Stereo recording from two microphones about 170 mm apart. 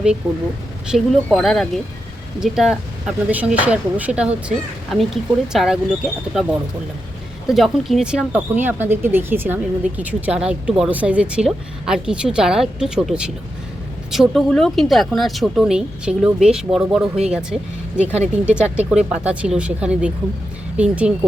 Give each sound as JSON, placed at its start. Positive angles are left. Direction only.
{"t": 0.2, "sound": "speech", "side_deg": 0}
{"t": 7.4, "sound": "speech", "side_deg": 0}